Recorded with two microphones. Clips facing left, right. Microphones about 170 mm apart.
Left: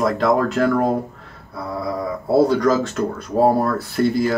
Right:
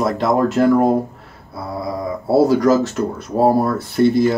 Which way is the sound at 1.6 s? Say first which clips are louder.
Right 1 dB; 10° right (ahead or behind).